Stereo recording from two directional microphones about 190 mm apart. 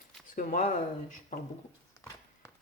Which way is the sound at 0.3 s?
45° left (ahead or behind).